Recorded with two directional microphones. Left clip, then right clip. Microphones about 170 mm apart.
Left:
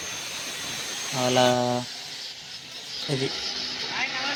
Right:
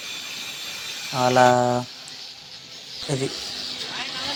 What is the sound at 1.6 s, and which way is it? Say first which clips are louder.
Speech: right 4 dB; 20° right (ahead or behind).